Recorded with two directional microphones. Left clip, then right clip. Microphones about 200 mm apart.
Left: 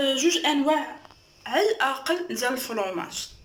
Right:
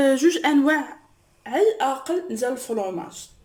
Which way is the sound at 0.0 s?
60° right (ahead or behind).